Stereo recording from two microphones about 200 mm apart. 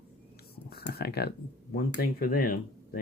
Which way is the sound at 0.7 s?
50° left (ahead or behind).